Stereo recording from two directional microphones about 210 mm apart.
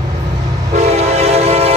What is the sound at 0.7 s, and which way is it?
Train, 30° right (ahead or behind).